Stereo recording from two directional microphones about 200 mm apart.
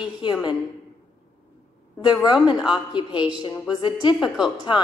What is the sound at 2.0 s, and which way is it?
A woman's voice, 20° left (ahead or behind).